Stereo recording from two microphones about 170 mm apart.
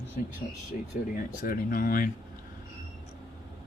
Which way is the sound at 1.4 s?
55° left (ahead or behind).